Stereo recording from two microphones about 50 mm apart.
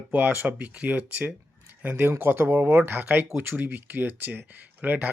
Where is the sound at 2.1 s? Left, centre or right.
Right.